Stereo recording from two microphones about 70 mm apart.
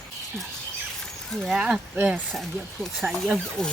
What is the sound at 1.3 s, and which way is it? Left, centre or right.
Speech, centre.